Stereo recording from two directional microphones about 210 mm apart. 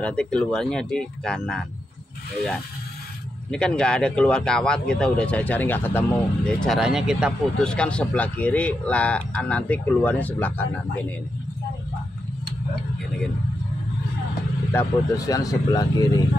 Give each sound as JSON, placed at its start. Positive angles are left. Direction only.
{"t": 0.0, "sound": "speech", "side_deg": 5}
{"t": 3.4, "sound": "speech", "side_deg": 5}
{"t": 14.7, "sound": "speech", "side_deg": 15}